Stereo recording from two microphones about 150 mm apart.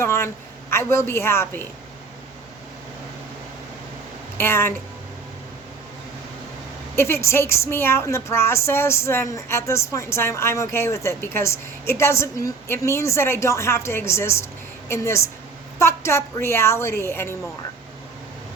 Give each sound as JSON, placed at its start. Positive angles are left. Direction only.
{"t": 0.0, "sound": "a sound", "side_deg": 20}
{"t": 0.7, "sound": "a woman's voice", "side_deg": 15}
{"t": 4.4, "sound": "a woman's voice", "side_deg": 15}
{"t": 6.9, "sound": "a woman's voice", "side_deg": 15}